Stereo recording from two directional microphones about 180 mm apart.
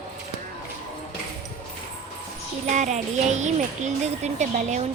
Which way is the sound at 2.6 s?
40° right (ahead or behind).